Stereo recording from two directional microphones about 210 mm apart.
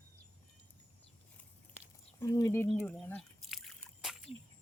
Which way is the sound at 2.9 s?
Centre (ahead or behind).